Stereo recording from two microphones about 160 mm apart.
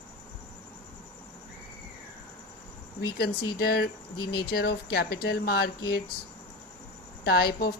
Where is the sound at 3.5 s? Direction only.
75° left (ahead or behind).